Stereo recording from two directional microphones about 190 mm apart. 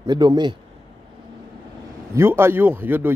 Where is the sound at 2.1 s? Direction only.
15° right (ahead or behind).